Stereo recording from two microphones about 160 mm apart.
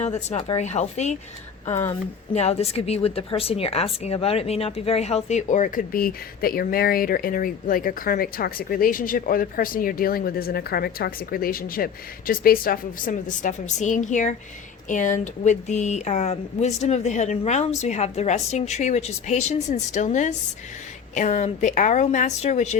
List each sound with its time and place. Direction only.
0.0 s a woman's voice: 45° left (ahead or behind)
2.3 s a woman's voice: 40° left (ahead or behind)